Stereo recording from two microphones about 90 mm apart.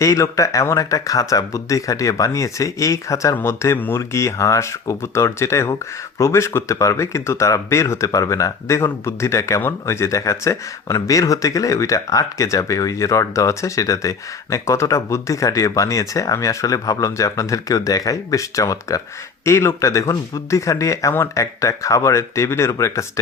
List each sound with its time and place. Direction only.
0.0 s speech: 35° left (ahead or behind)